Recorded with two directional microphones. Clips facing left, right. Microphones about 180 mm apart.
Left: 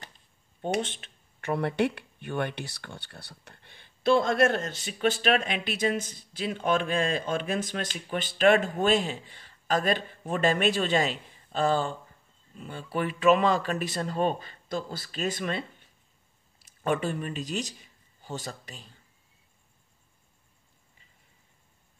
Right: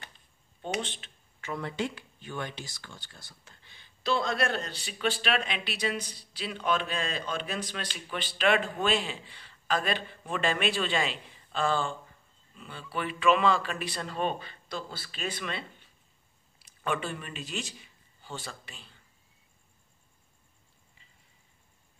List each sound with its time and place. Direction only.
0.6 s speech: 50° left (ahead or behind)